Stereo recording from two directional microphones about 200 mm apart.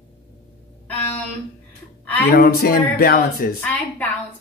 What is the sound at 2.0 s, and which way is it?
Speech, 10° left (ahead or behind).